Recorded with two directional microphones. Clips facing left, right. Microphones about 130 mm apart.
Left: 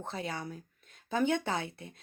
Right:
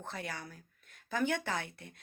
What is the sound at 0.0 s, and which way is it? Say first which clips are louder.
Speech: left 5 dB; 25° left (ahead or behind).